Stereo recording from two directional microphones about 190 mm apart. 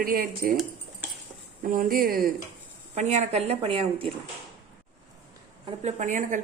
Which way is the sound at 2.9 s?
35° right (ahead or behind).